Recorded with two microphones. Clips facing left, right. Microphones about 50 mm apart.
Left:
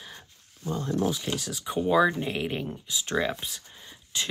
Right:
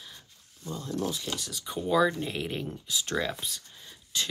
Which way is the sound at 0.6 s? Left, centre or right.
Centre.